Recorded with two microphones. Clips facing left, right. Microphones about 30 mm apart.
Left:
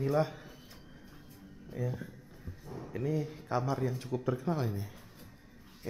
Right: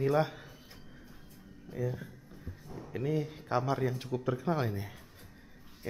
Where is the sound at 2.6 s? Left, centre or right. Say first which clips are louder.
Left 3 dB; centre.